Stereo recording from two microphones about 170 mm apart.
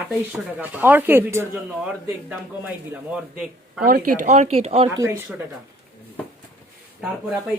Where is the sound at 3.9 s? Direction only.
55° right (ahead or behind); by 4.9 s 35° right (ahead or behind).